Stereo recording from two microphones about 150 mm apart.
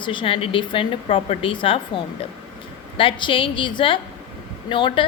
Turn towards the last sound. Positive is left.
turn(degrees=35)  # may be behind; listen again after turning